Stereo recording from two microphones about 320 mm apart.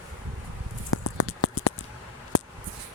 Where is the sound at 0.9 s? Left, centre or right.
Left.